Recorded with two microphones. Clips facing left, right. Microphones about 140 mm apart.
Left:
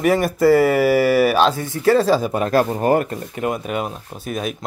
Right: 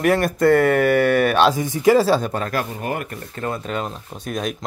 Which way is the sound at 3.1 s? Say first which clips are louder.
Left 4 dB; 15° left (ahead or behind).